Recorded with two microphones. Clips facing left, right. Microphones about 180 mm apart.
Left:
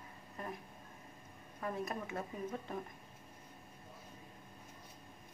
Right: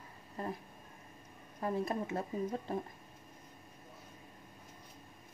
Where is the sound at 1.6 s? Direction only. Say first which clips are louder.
Right 5 dB; 30° right (ahead or behind).